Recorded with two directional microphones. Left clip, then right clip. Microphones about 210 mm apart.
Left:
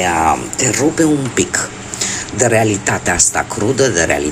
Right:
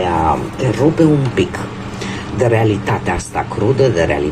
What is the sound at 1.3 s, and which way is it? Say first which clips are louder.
Speech: left 1 dB; 30° left (ahead or behind).